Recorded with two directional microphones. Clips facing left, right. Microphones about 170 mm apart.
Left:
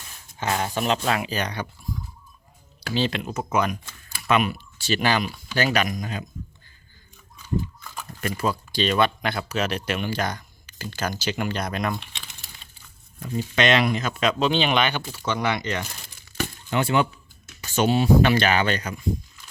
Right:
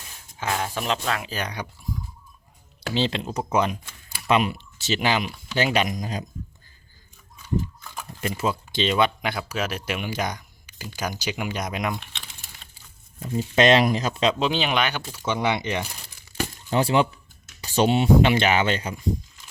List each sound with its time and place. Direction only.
0.3 s speech: centre (ahead or behind)
1.0 s speech: 10° left (ahead or behind)
1.3 s speech: 5° right (ahead or behind)
2.9 s speech: 25° right (ahead or behind)
8.2 s speech: 25° right (ahead or behind)
13.1 s speech: 25° right (ahead or behind)
13.6 s speech: 35° right (ahead or behind)
14.4 s speech: 5° right (ahead or behind)
15.9 s crumpling: centre (ahead or behind)
16.6 s speech: 30° right (ahead or behind)